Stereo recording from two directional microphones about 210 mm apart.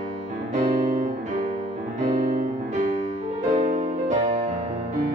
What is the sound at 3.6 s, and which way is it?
Music, 35° right (ahead or behind).